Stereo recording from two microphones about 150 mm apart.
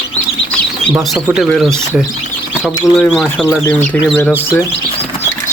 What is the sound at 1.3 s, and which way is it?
Speech, centre (ahead or behind).